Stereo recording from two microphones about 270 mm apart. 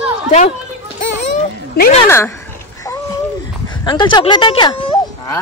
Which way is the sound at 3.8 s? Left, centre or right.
Centre.